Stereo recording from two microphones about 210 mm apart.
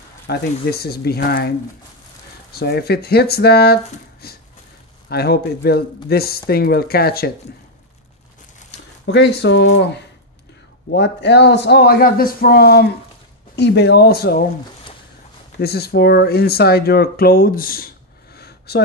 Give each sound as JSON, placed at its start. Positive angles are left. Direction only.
{"t": 0.3, "sound": "a man's voice", "side_deg": 50}
{"t": 2.5, "sound": "a man's voice", "side_deg": 50}
{"t": 9.0, "sound": "a man's voice", "side_deg": 55}
{"t": 15.6, "sound": "speech", "side_deg": 50}